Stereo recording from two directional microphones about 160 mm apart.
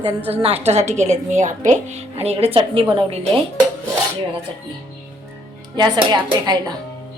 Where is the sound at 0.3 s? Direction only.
40° right (ahead or behind).